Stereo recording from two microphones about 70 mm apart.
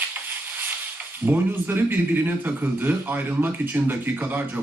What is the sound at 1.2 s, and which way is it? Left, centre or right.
Speech, right.